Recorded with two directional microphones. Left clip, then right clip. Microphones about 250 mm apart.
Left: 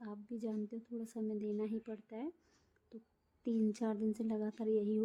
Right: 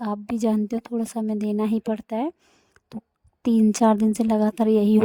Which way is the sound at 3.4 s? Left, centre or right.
Right.